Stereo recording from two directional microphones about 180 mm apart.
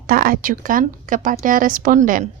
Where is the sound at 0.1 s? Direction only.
50° right (ahead or behind).